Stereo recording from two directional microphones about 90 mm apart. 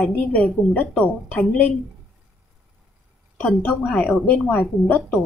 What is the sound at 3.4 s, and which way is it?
A woman's voice, 15° left (ahead or behind).